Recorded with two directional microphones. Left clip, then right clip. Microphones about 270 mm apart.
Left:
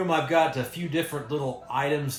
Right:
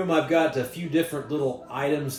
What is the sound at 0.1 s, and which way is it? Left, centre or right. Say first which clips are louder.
Speech: right 1 dB; centre.